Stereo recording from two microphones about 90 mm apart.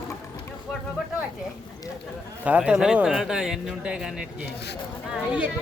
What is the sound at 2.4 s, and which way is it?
Speech, 15° right (ahead or behind).